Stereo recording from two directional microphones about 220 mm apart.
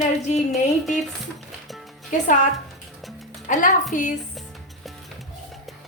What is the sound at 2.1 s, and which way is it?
Speech, 35° left (ahead or behind).